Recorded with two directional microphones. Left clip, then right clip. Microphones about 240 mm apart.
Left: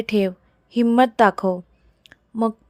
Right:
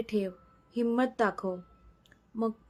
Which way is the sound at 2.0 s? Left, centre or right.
Left.